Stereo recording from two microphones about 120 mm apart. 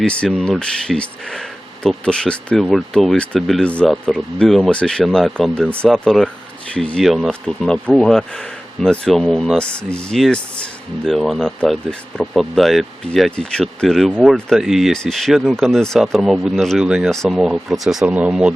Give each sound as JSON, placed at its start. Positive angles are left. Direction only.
{"t": 0.0, "sound": "speech", "side_deg": 10}